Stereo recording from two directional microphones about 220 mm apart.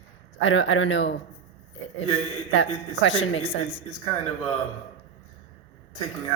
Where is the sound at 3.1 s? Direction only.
25° left (ahead or behind).